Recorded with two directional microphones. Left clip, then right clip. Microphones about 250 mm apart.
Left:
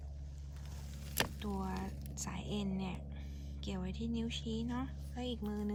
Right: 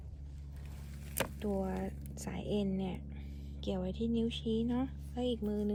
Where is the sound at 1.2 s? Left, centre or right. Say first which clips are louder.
Right 2 dB; centre.